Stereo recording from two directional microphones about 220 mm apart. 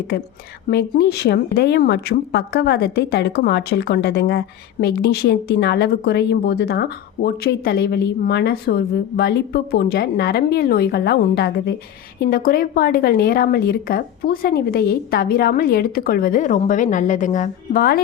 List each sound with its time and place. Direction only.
0.7 s speech: 50° left (ahead or behind)